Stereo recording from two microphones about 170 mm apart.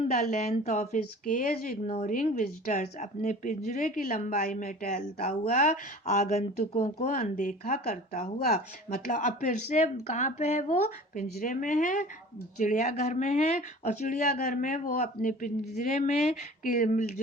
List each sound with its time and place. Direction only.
0.5 s a woman's voice: 40° left (ahead or behind); by 5.4 s 60° left (ahead or behind)
5.5 s speech: 50° left (ahead or behind)